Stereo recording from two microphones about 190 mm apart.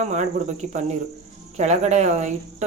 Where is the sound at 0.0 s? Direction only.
35° right (ahead or behind).